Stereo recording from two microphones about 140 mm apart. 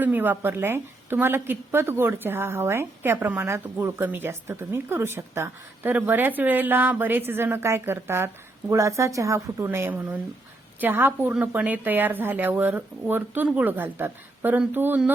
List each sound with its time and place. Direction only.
0.0 s a woman's voice: 15° right (ahead or behind)